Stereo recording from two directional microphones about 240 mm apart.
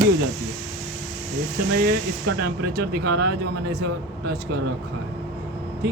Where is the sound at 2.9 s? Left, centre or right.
Right.